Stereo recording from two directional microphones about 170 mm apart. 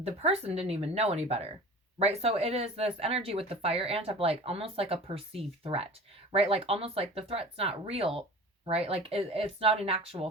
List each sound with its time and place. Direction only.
0.0 s speech: 35° right (ahead or behind)